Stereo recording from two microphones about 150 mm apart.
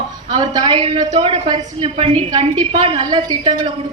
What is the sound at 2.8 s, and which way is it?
Speech, 30° right (ahead or behind).